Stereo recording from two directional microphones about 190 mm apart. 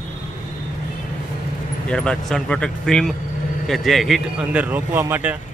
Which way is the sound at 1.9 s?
5° left (ahead or behind).